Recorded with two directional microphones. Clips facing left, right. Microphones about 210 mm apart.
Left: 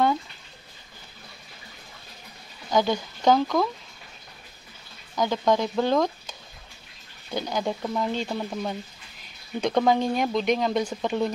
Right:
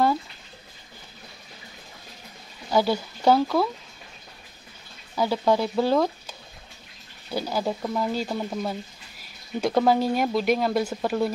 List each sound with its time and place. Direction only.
2.7 s speech: 10° right (ahead or behind)
5.1 s speech: 5° right (ahead or behind)
7.3 s speech: 5° right (ahead or behind)